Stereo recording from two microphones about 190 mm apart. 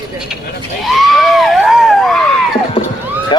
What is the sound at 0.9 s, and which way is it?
Screaming, centre (ahead or behind).